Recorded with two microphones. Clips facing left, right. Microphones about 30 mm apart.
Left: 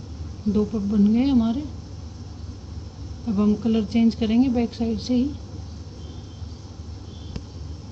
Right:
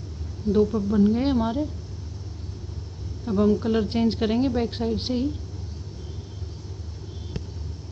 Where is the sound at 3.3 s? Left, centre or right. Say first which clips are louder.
Even; right.